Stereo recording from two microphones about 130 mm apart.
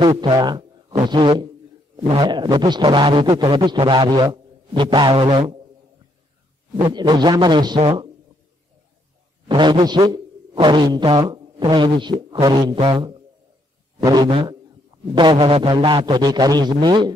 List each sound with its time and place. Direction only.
0.1 s a man's voice: 35° right (ahead or behind)
6.8 s a man's voice: 35° right (ahead or behind)
9.5 s a man's voice: 35° right (ahead or behind)